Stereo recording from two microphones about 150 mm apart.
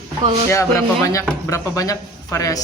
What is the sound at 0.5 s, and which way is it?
Speech, 20° left (ahead or behind).